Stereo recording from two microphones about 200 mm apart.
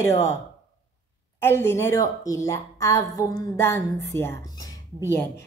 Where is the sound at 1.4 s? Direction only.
10° left (ahead or behind).